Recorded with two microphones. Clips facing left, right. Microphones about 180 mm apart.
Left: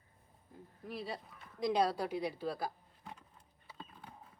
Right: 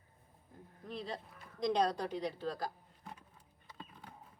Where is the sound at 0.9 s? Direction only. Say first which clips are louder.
Even; 5° left (ahead or behind).